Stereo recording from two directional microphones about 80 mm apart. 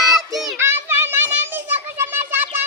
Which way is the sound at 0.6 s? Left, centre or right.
Right.